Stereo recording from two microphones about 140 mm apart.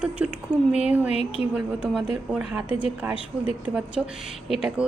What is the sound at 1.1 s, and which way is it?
Speech, 45° left (ahead or behind).